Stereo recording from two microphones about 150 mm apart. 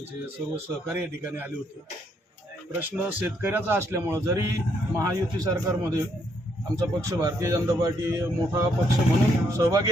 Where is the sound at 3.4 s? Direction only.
15° right (ahead or behind).